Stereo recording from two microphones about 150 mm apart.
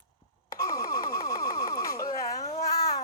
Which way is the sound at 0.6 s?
25° left (ahead or behind).